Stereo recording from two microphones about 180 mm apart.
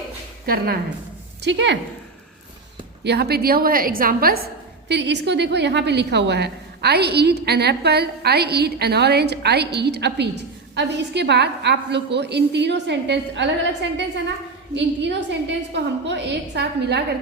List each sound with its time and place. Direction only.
0.4 s a woman's voice: 55° right (ahead or behind)
1.4 s speech: 75° right (ahead or behind)
3.0 s a woman's voice: 65° right (ahead or behind)
4.9 s a woman's voice: 75° right (ahead or behind)
14.8 s a woman's voice: 75° right (ahead or behind)